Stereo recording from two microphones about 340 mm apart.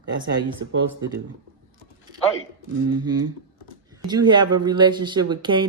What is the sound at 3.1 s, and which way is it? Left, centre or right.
Speech, right.